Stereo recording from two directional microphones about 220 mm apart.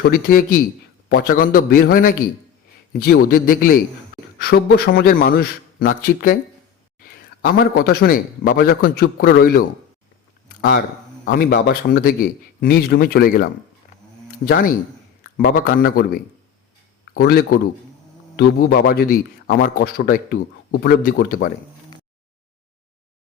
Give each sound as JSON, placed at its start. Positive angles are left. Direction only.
{"t": 0.0, "sound": "a man's voice", "side_deg": 40}
{"t": 7.4, "sound": "a man's voice", "side_deg": 40}